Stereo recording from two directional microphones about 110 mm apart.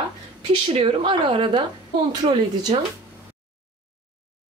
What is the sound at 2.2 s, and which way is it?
Speech, 65° right (ahead or behind).